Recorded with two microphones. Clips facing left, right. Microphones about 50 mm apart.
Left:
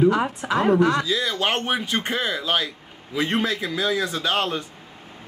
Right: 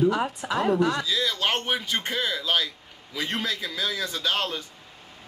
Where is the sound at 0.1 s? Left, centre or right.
Left.